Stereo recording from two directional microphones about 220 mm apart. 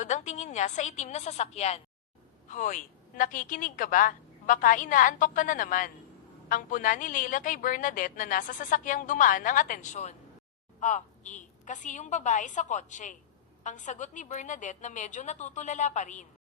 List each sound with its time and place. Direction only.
0.0 s a woman's voice: 35° left (ahead or behind)